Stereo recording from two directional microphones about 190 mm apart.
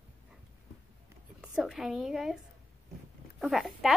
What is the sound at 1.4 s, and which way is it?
A woman's voice, centre (ahead or behind).